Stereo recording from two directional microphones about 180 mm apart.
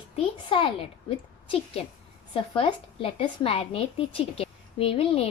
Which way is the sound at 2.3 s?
25° left (ahead or behind).